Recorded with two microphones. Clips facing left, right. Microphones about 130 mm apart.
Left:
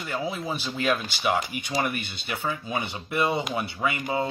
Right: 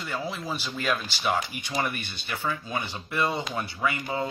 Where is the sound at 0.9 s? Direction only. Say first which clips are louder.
Left 2 dB; 5° left (ahead or behind).